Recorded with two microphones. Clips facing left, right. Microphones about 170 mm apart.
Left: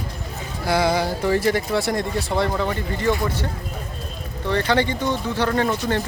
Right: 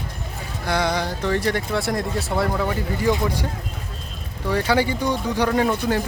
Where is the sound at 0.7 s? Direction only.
5° left (ahead or behind).